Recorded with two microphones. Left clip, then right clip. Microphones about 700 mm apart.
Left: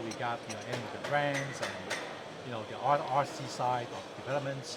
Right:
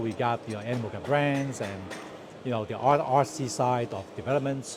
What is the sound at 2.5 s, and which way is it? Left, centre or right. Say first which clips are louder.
A man's voice: right 6 dB; right.